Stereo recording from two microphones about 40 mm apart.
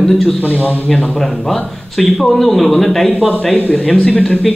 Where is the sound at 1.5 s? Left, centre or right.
Centre.